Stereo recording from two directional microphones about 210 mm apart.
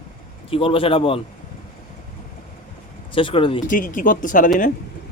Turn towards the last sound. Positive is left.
turn(degrees=40)  # may be behind; listen again after turning